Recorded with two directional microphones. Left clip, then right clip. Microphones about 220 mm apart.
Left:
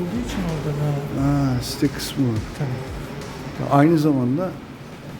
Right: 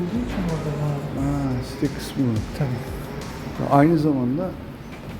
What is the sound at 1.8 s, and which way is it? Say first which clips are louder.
Speech: left 3 dB; 20° left (ahead or behind).